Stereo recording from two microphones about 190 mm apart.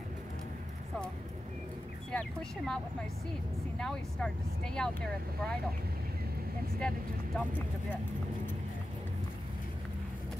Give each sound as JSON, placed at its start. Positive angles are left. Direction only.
{"t": 2.0, "sound": "speech", "side_deg": 5}
{"t": 3.8, "sound": "speech", "side_deg": 5}
{"t": 7.3, "sound": "speech", "side_deg": 10}